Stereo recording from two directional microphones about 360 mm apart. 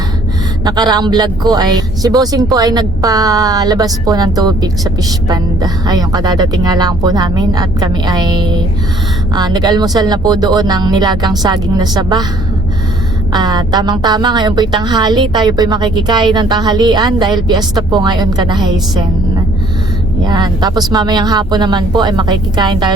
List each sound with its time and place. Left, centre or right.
0.6 s speech: centre
13.3 s speech: centre
20.2 s speech: centre